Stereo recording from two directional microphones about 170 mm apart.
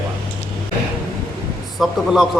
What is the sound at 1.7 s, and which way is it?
Speech, centre (ahead or behind).